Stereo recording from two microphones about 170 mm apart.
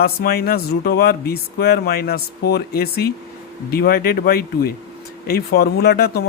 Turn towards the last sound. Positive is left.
turn(degrees=65)  # may be behind; listen again after turning